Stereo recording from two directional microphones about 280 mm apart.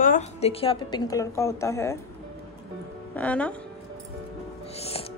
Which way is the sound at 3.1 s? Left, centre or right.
Centre.